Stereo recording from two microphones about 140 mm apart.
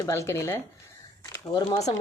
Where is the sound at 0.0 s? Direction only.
20° left (ahead or behind).